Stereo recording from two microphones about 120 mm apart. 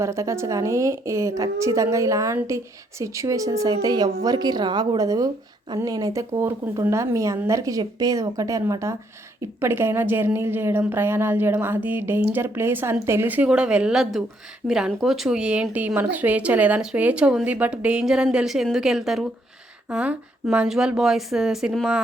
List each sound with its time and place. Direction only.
0.0 s a woman's voice: 25° right (ahead or behind); by 21.8 s centre (ahead or behind)